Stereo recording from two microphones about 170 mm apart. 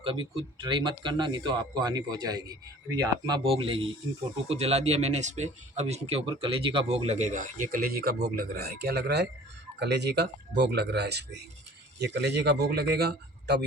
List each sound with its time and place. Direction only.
0.0 s a man's voice: 30° right (ahead or behind); by 13.7 s 75° right (ahead or behind)